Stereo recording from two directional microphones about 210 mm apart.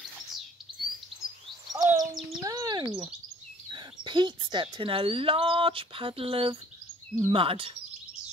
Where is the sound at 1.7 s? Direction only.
20° right (ahead or behind).